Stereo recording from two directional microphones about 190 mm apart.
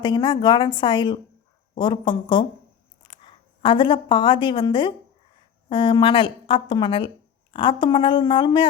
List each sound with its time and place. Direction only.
0.0 s a woman's voice: 20° left (ahead or behind)
3.6 s a woman's voice: 25° left (ahead or behind)